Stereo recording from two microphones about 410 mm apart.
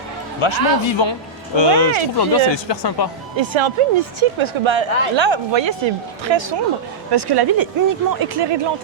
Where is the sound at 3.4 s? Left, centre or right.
Right.